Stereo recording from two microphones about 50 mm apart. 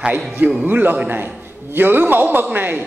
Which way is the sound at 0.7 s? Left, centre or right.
Right.